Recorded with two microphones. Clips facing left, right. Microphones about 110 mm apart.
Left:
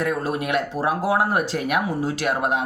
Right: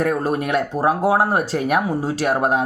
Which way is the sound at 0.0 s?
40° right (ahead or behind).